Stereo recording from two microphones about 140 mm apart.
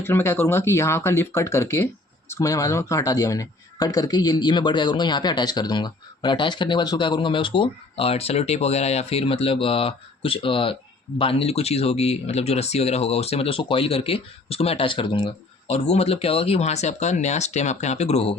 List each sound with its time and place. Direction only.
0.0 s speech: 15° left (ahead or behind); by 15.7 s 35° left (ahead or behind)
15.7 s speech: 50° left (ahead or behind)